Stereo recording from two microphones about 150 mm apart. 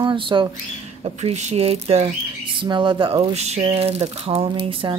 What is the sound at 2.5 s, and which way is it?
Speech, 30° right (ahead or behind).